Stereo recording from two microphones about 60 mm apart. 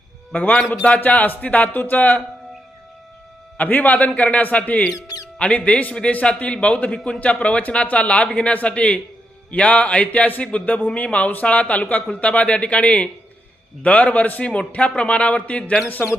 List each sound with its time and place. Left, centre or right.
0.3 s a man's voice: left
3.6 s a man's voice: left
4.9 s speech: left
5.4 s a man's voice: left